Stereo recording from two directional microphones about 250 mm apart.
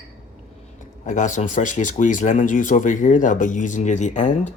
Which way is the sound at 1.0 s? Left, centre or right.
Left.